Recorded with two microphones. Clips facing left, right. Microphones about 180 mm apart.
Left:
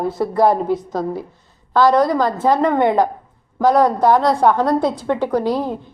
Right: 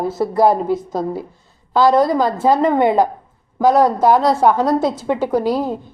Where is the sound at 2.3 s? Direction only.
25° right (ahead or behind).